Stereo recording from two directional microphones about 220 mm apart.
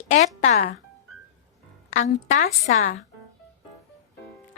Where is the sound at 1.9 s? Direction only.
35° left (ahead or behind).